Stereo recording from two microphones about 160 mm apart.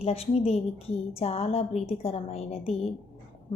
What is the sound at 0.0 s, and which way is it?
A woman's voice, 40° left (ahead or behind).